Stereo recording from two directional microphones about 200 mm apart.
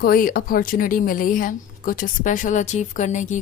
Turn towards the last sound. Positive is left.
turn(degrees=35)  # may be behind; listen again after turning